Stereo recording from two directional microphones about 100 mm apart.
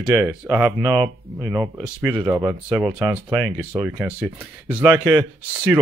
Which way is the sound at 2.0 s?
10° right (ahead or behind).